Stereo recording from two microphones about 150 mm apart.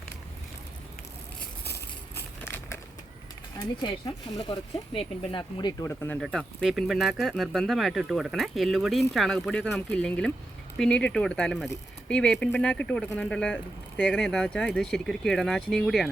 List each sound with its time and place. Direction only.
2.1 s a sound: 15° left (ahead or behind)
3.8 s speech: 30° left (ahead or behind)
5.8 s speech: 15° left (ahead or behind)
6.1 s speech: centre (ahead or behind)